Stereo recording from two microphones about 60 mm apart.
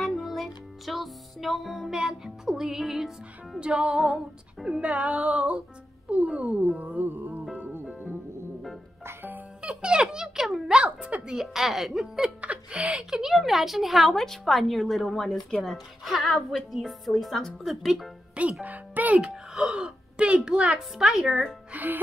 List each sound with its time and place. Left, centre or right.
0.0 s music: centre
2.0 s speech: centre
3.5 s speech: centre
9.0 s music: right
9.6 s a child's voice: centre
10.8 s speech: centre
11.2 s speech: centre
12.4 s speech: right
12.9 s speech: centre
18.3 s speech: right
19.2 s speech: centre
21.7 s music: right